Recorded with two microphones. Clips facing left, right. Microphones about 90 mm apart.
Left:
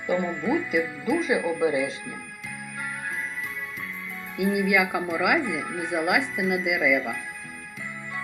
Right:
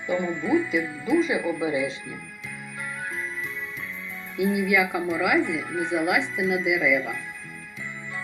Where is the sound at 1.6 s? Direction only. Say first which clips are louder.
Left 2 dB; 60° left (ahead or behind).